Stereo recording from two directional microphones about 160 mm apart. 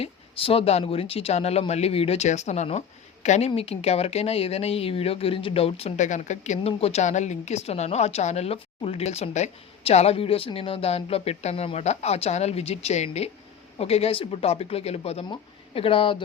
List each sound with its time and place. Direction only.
0.0 s speech: 35° left (ahead or behind)